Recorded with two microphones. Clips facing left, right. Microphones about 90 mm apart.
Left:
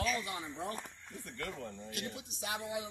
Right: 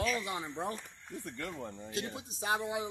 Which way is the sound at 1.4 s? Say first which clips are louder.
Left 1 dB; 20° right (ahead or behind).